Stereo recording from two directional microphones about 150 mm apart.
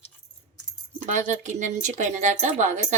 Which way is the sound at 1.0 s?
55° right (ahead or behind).